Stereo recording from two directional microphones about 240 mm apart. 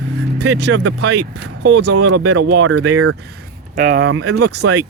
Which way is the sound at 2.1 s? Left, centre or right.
Right.